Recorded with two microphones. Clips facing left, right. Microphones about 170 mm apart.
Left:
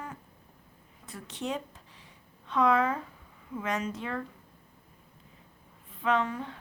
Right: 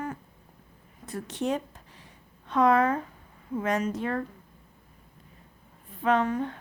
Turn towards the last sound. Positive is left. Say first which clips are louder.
# right 4 dB
turn(degrees=-50)  # may be behind; listen again after turning